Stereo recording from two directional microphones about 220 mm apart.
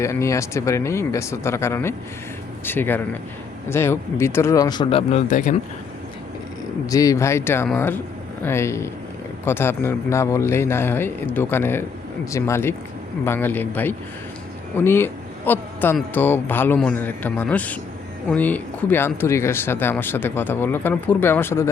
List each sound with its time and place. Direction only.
0.0 s speech: 15° left (ahead or behind); by 5.5 s 35° left (ahead or behind)
6.8 s speech: 15° left (ahead or behind)